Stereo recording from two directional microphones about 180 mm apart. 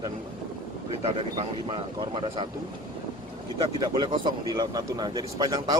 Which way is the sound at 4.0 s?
25° right (ahead or behind).